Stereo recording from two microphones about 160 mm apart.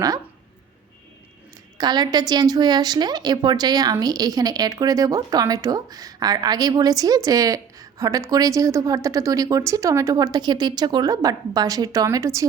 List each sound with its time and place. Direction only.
1.8 s a woman's voice: 25° right (ahead or behind)